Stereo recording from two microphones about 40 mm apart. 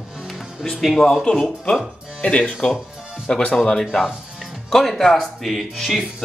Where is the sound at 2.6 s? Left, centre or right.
Left; by 6.0 s centre.